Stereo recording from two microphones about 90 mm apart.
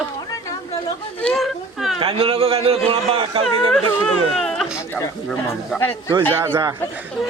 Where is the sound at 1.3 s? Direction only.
Centre (ahead or behind).